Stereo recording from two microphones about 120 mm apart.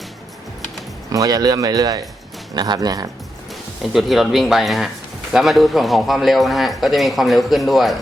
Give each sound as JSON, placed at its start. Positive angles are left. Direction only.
{"t": 1.1, "sound": "speech", "side_deg": -30}
{"t": 3.9, "sound": "speech", "side_deg": 0}